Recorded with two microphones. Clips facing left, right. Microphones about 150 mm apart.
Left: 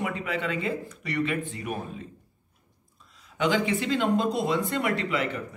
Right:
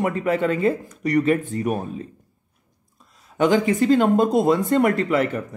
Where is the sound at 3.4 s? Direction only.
45° right (ahead or behind).